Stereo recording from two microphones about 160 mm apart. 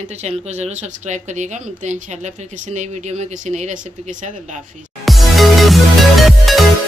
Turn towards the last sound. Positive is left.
turn(degrees=0)  # may be behind; listen again after turning